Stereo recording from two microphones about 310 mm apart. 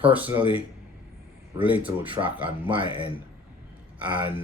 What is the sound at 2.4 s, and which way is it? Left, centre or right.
Speech, centre.